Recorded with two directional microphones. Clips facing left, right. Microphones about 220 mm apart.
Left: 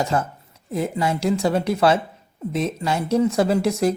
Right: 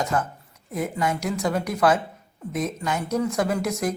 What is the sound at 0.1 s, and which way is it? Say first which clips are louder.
A woman's voice: left 2 dB; 25° left (ahead or behind).